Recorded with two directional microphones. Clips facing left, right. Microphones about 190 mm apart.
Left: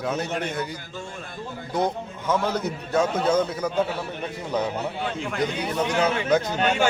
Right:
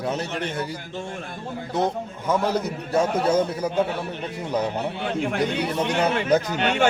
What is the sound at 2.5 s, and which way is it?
Speech, 35° right (ahead or behind).